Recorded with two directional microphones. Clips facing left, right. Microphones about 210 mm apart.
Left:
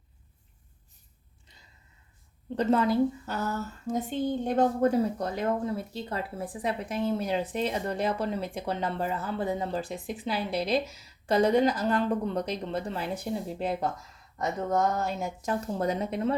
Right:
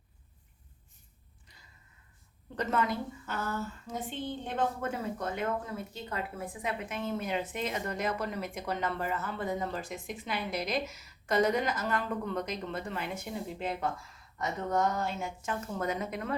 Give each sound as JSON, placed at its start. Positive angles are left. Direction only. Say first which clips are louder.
{"t": 2.6, "sound": "speech", "louder": "left 8 dB", "side_deg": 30}